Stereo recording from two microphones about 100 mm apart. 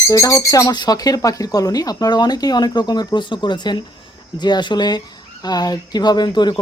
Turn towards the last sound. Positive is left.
turn(degrees=45)  # may be behind; listen again after turning